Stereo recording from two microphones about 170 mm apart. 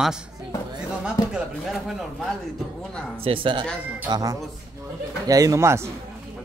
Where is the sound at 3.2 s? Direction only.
30° right (ahead or behind); by 5.9 s 15° right (ahead or behind).